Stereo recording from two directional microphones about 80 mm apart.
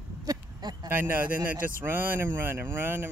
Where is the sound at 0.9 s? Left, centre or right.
Right.